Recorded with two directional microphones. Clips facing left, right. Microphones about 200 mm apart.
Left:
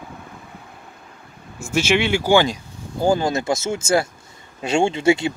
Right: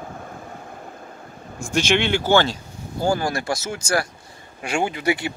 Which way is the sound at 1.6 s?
5° left (ahead or behind).